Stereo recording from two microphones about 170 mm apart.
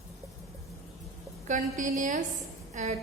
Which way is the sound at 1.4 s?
50° right (ahead or behind).